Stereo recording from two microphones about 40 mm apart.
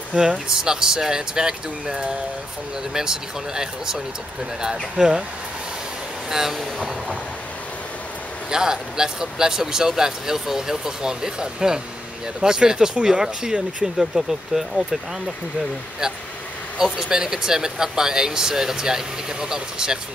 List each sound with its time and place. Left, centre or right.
0.1 s speech: centre
6.3 s speech: centre
8.5 s speech: centre
16.7 s speech: centre